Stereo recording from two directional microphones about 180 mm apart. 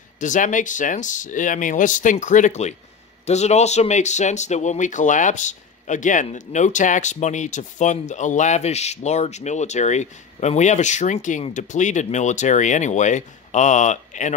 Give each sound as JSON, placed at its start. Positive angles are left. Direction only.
{"t": 0.2, "sound": "speech", "side_deg": 45}